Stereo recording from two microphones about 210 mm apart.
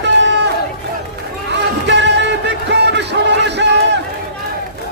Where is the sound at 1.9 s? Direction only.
55° right (ahead or behind).